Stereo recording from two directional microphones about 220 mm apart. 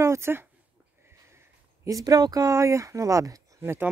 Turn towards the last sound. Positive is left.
turn(degrees=-10)  # may be behind; listen again after turning